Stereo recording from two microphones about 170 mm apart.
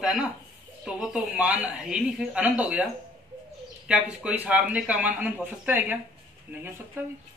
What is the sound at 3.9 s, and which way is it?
Speech, 5° right (ahead or behind).